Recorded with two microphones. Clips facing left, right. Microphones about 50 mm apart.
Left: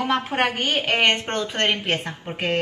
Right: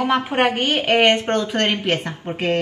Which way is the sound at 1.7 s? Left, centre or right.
Right.